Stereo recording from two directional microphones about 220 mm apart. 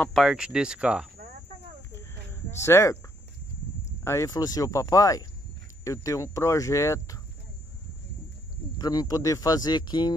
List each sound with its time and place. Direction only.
0.0 s speech: centre (ahead or behind)
1.9 s a sound: 10° left (ahead or behind)
4.0 s speech: 15° left (ahead or behind)
8.7 s speech: 15° left (ahead or behind)